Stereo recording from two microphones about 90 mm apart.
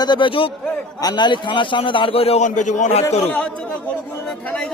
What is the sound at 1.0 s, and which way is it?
A man's voice, 50° left (ahead or behind).